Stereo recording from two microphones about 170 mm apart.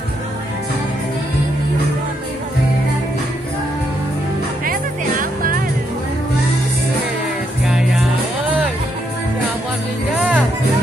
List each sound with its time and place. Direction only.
4.6 s music: 55° right (ahead or behind)
7.6 s music: centre (ahead or behind)
10.1 s music: 10° right (ahead or behind)